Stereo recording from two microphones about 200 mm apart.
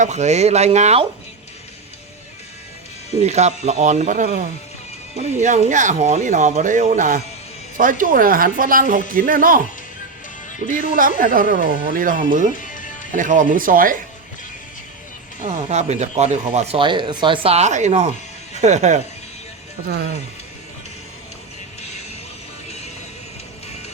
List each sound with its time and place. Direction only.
0.0 s speech: 35° right (ahead or behind)
3.2 s speech: 35° right (ahead or behind)
12.5 s music: 40° left (ahead or behind)
13.1 s speech: 40° right (ahead or behind)
15.4 s speech: 35° right (ahead or behind)
19.9 s speech: 55° right (ahead or behind)